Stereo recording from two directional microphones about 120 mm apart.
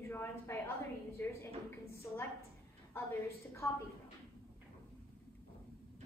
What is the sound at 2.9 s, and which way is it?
Speech, 20° left (ahead or behind).